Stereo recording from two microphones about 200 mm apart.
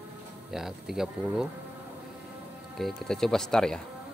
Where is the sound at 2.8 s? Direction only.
Centre (ahead or behind).